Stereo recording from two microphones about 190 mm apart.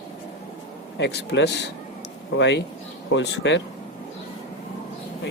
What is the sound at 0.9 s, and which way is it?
Speech, 65° left (ahead or behind).